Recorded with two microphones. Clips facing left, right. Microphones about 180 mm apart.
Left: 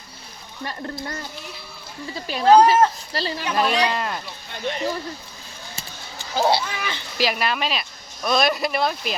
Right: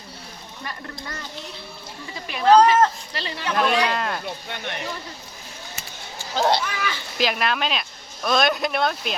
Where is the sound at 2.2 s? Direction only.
30° left (ahead or behind).